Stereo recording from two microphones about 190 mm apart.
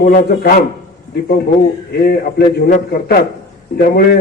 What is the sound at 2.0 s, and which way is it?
Speech, 55° left (ahead or behind).